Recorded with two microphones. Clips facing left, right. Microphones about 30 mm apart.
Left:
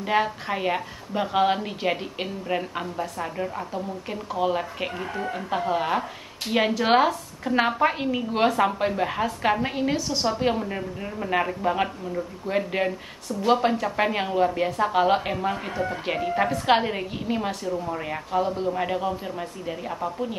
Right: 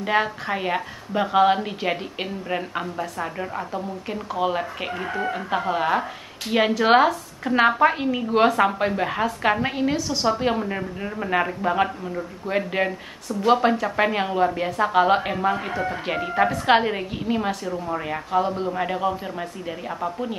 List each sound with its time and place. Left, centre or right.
0.0 s a woman's voice: centre
10.2 s a woman's voice: centre
11.2 s a woman's voice: centre